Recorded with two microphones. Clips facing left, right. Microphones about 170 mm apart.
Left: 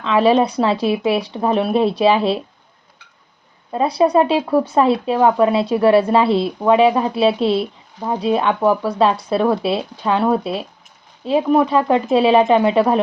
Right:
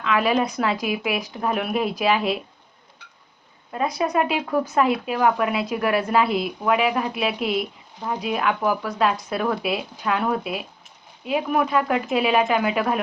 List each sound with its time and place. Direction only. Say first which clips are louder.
0.0 s speech: left 7 dB; 30° left (ahead or behind)
3.7 s speech: left 8 dB; 30° left (ahead or behind)